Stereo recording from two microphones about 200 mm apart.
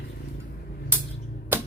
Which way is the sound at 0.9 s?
10° right (ahead or behind).